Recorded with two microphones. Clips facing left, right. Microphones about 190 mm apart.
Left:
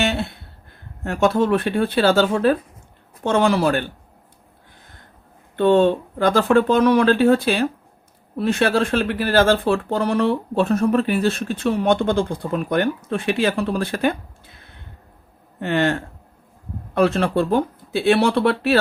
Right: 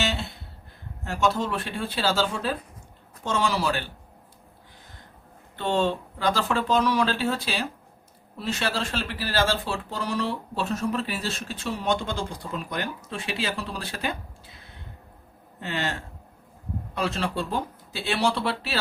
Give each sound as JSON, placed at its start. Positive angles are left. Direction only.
{"t": 0.0, "sound": "speech", "side_deg": 55}
{"t": 5.5, "sound": "speech", "side_deg": 55}